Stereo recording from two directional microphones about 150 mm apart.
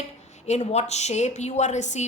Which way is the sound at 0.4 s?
50° left (ahead or behind).